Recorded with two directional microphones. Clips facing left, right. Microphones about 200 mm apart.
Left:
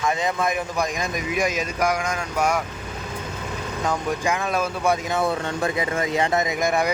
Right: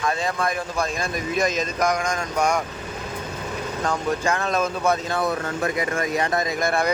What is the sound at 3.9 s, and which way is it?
Speech, 10° left (ahead or behind).